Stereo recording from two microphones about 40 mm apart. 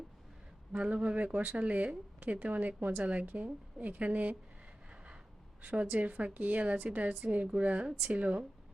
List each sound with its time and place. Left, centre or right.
0.8 s a woman's voice: right
5.6 s a woman's voice: right